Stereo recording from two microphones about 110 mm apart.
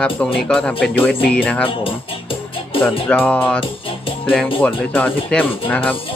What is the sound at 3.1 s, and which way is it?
Speech, 15° left (ahead or behind).